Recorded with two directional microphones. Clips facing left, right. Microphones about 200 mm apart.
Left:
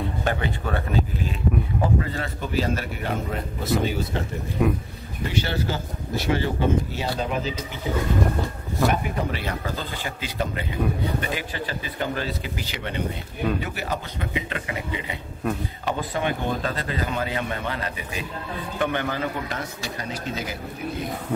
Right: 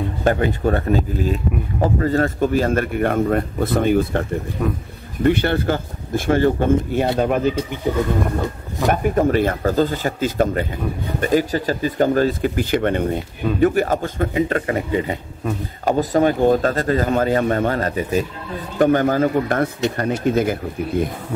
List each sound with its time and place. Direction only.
0.2 s speech: 45° right (ahead or behind)
4.6 s a man's voice: 5° left (ahead or behind)
5.2 s speech: 55° right (ahead or behind)
9.0 s speech: 45° right (ahead or behind)